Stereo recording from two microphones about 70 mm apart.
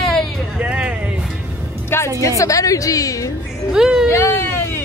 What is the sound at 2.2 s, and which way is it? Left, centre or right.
A woman's voice, left.